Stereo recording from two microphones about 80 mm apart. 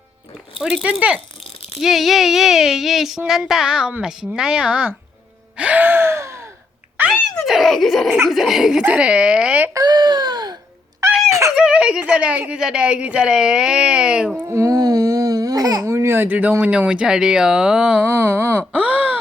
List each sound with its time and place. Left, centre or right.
0.6 s speech: centre
1.8 s speech: centre
5.5 s gasp: centre; by 6.5 s right
7.0 s a sound: right
7.4 s giggle: centre
8.3 s speech: centre
8.8 s speech: centre
9.7 s baby cry: right
11.0 s a sound: right
11.5 s speech: centre
14.4 s babbling: right
15.9 s speech: right; by 18.0 s centre
18.0 s a sound: right
18.7 s wail: centre